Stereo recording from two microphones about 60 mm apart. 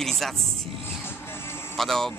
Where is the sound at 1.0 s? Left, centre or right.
Left.